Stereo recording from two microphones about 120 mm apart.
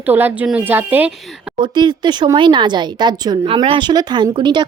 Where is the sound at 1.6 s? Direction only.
40° right (ahead or behind).